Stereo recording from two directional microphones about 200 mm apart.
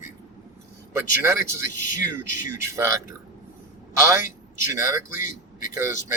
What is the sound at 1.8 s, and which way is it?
Speech, 40° left (ahead or behind).